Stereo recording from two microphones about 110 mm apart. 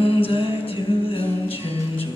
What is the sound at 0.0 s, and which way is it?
Music, 55° left (ahead or behind).